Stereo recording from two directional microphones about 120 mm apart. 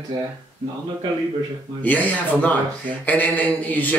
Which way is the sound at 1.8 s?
15° left (ahead or behind).